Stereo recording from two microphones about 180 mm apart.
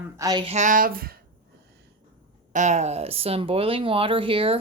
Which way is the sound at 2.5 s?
40° right (ahead or behind).